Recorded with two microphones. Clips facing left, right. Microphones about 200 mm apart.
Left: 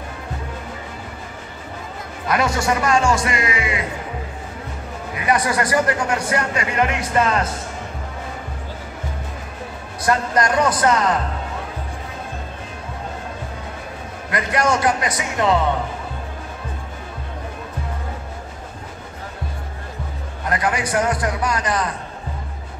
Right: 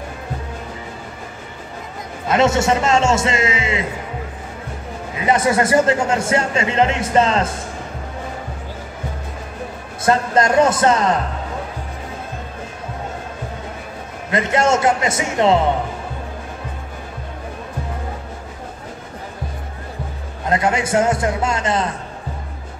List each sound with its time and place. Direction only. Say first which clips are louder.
2.2 s a man's voice: right 4 dB; 25° right (ahead or behind)
5.1 s a man's voice: right 3 dB; 25° right (ahead or behind)
10.0 s a man's voice: right 3 dB; 25° right (ahead or behind)
14.3 s a man's voice: right 3 dB; 25° right (ahead or behind)
20.4 s a man's voice: right 3 dB; 25° right (ahead or behind)